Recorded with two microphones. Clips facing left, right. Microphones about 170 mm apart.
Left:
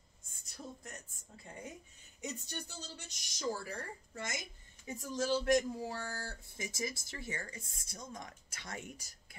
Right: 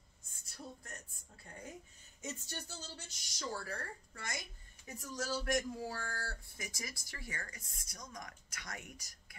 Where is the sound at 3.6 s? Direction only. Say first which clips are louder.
Left 1 dB; 20° left (ahead or behind).